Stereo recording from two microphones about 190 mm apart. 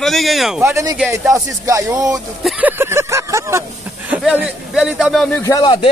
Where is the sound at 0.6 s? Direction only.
15° right (ahead or behind).